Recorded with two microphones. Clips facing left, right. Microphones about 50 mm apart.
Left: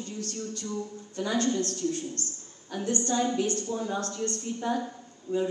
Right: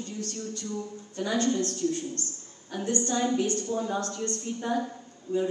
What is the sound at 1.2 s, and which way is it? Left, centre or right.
A man's voice, right.